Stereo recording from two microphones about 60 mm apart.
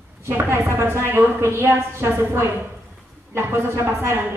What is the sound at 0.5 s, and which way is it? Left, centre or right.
A woman's voice, right.